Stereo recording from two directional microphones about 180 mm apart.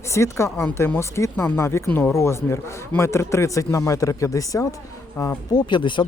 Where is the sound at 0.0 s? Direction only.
15° left (ahead or behind).